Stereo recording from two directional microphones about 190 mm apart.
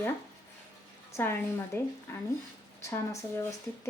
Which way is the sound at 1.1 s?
15° left (ahead or behind).